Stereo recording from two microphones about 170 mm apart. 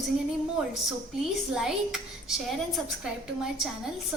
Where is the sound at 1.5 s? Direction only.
Centre (ahead or behind).